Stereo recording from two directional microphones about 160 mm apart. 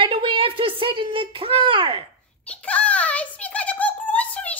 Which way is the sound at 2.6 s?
10° left (ahead or behind).